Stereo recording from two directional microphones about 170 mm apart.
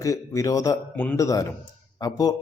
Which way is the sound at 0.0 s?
20° left (ahead or behind).